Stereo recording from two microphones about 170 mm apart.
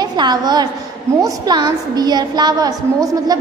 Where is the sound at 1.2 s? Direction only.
25° right (ahead or behind).